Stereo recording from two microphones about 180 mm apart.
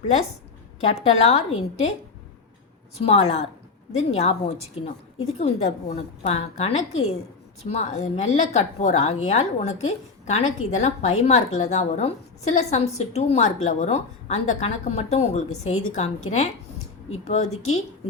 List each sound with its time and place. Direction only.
0.8 s a woman's voice: 35° left (ahead or behind)
3.1 s a woman's voice: 40° left (ahead or behind)